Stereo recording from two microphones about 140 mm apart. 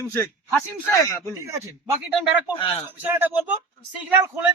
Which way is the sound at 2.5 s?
40° left (ahead or behind).